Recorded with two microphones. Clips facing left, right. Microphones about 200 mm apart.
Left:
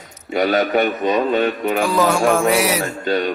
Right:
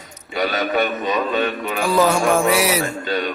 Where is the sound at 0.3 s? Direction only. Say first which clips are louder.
Left 4 dB; 50° left (ahead or behind).